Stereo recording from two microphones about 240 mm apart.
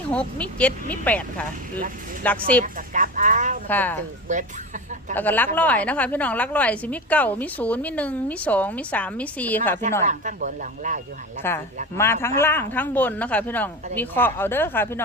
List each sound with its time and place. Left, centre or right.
0.1 s a woman's voice: centre
2.7 s speech: right
3.7 s a woman's voice: centre
4.3 s speech: right
5.1 s a woman's voice: centre
10.1 s speech: right
11.4 s a woman's voice: centre